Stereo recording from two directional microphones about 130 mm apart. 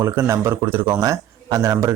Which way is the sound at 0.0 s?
20° right (ahead or behind).